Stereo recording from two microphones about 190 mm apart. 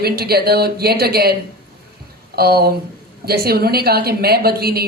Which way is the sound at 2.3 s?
55° right (ahead or behind).